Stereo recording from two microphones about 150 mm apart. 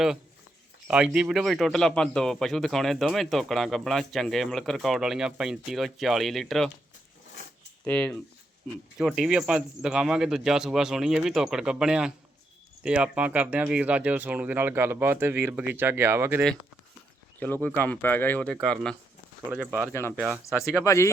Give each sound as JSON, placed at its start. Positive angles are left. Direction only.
{"t": 0.9, "sound": "speech", "side_deg": -5}
{"t": 7.9, "sound": "speech", "side_deg": 10}
{"t": 17.4, "sound": "speech", "side_deg": 10}
{"t": 19.5, "sound": "speech", "side_deg": -10}
{"t": 19.9, "sound": "speech", "side_deg": 15}